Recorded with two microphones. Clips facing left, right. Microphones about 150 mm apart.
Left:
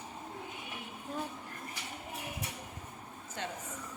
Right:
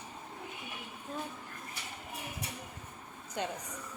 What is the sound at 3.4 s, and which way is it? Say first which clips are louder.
Speech: right 4 dB; 15° right (ahead or behind).